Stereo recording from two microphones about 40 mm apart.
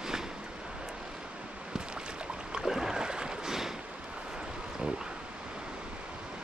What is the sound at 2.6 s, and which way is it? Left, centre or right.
Boat, centre.